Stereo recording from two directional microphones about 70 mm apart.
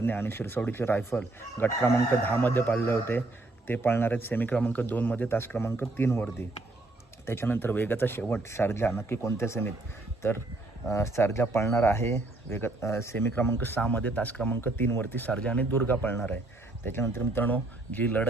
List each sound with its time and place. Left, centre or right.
0.0 s speech: left
7.3 s speech: left
10.8 s speech: left